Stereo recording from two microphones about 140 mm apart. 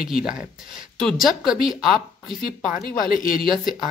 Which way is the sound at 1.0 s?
Centre (ahead or behind).